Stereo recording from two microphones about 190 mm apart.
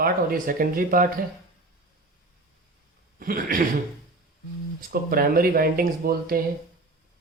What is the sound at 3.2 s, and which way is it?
Speech, 50° right (ahead or behind).